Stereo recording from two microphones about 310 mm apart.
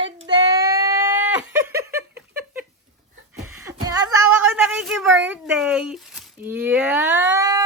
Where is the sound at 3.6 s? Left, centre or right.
Centre.